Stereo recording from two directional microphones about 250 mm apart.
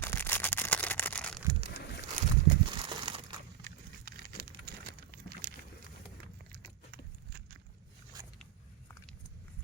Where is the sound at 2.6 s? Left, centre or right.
Centre.